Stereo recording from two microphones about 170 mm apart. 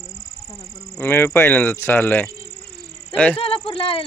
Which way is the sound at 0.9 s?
15° left (ahead or behind).